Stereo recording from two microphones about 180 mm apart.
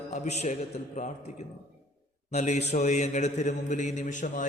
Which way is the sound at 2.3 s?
40° left (ahead or behind).